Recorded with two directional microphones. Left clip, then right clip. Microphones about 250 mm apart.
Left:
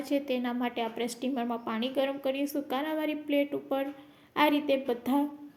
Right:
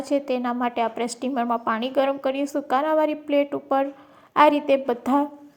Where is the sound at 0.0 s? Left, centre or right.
Centre.